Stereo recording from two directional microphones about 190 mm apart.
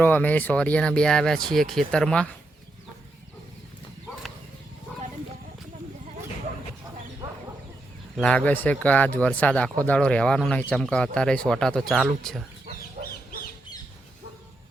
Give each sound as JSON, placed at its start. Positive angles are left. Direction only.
{"t": 0.0, "sound": "speech", "side_deg": 10}
{"t": 8.1, "sound": "speech", "side_deg": 5}
{"t": 13.0, "sound": "chicken", "side_deg": -50}